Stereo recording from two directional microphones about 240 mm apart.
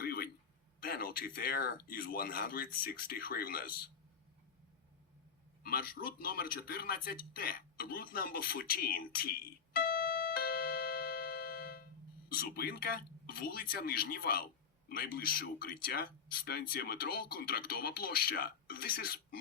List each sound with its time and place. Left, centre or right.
0.0 s a sound: left
0.9 s speech: left
5.6 s speech: left
9.7 s music: left
12.3 s speech: left